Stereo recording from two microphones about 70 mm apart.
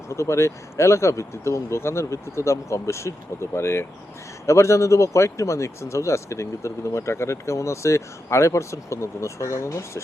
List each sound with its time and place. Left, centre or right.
0.2 s speech: left